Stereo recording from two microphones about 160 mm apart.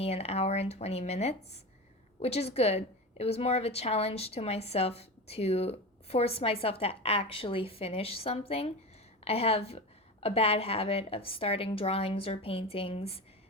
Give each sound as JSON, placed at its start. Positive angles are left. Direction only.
{"t": 0.0, "sound": "a woman's voice", "side_deg": 40}